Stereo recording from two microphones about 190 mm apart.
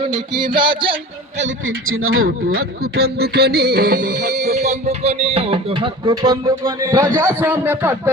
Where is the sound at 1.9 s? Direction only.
90° right.